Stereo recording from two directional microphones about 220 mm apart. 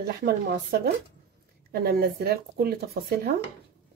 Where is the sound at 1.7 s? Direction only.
45° right (ahead or behind).